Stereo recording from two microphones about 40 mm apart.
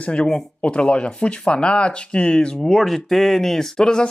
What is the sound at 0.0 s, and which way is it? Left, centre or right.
Speech, left.